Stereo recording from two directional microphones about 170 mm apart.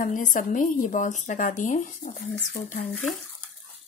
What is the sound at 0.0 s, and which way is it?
A woman's voice, 50° left (ahead or behind).